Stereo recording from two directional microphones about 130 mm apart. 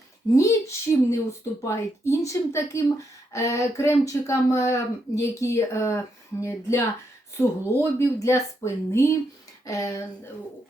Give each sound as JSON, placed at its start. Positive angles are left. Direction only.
{"t": 0.3, "sound": "speech", "side_deg": 20}